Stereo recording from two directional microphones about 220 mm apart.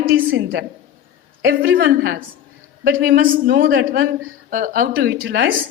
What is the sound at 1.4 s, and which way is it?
A woman's voice, 45° right (ahead or behind).